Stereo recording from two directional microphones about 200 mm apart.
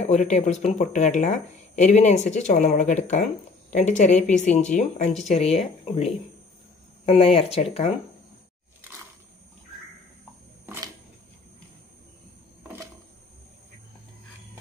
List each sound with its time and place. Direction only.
0.0 s speech: 35° left (ahead or behind)
5.2 s speech: centre (ahead or behind)
7.1 s speech: 30° left (ahead or behind)